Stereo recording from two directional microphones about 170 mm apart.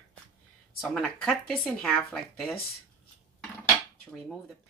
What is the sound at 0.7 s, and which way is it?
Speech, centre (ahead or behind).